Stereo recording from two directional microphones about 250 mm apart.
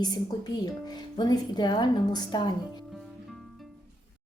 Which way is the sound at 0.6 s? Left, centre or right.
Centre.